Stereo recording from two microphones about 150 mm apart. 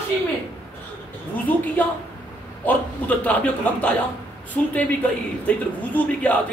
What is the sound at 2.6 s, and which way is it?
Speech, 10° left (ahead or behind).